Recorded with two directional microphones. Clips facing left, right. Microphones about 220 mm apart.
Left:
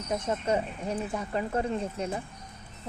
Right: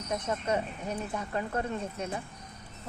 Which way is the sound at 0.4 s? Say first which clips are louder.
Left 2 dB; 30° left (ahead or behind).